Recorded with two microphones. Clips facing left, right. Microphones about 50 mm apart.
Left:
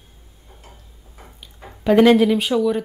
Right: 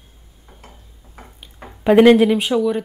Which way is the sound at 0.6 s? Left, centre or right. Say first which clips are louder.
Right 2 dB; right.